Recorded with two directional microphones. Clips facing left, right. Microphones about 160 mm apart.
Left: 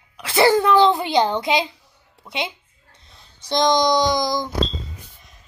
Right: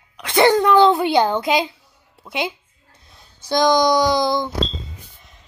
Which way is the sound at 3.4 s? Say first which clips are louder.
Right 2 dB; 5° right (ahead or behind).